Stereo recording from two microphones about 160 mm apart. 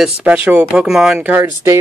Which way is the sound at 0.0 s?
10° right (ahead or behind).